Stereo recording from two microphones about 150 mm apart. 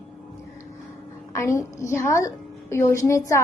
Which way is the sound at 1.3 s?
20° left (ahead or behind).